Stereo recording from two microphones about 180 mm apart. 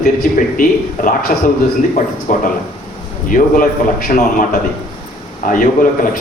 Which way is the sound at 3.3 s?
50° left (ahead or behind).